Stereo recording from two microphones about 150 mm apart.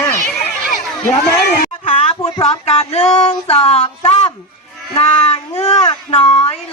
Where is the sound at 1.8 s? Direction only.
40° left (ahead or behind).